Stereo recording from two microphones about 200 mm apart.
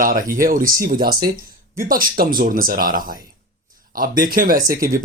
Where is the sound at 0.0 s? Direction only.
45° right (ahead or behind).